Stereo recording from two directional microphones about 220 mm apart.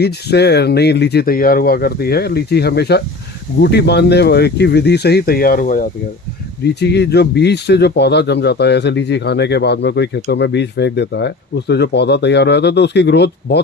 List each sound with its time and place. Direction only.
0.0 s speech: 50° left (ahead or behind)
6.7 s speech: 50° left (ahead or behind)